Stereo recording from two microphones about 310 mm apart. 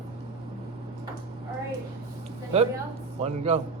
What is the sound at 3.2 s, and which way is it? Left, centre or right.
Speech, centre.